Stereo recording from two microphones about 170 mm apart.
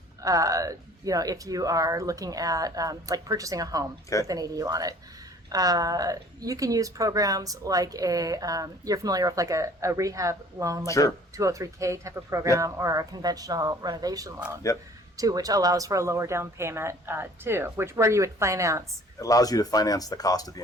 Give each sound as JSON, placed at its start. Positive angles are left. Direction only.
{"t": 0.2, "sound": "a woman's voice", "side_deg": -20}
{"t": 10.8, "sound": "speech", "side_deg": 20}
{"t": 11.3, "sound": "a woman's voice", "side_deg": -20}
{"t": 14.3, "sound": "speech", "side_deg": -10}
{"t": 15.1, "sound": "speech", "side_deg": -20}
{"t": 19.2, "sound": "speech", "side_deg": 20}